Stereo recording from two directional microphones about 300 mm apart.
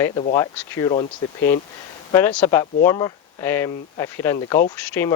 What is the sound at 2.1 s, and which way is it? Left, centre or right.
Speech, centre.